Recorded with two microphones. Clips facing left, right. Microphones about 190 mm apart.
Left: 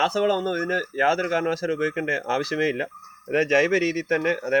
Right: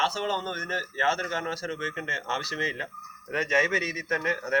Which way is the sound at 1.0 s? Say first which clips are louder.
Left 7 dB; 90° left.